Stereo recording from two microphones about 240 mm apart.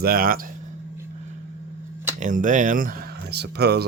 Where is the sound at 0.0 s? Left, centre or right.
Right.